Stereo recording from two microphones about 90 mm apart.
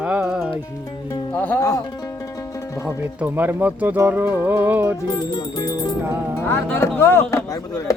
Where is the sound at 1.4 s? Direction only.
20° left (ahead or behind).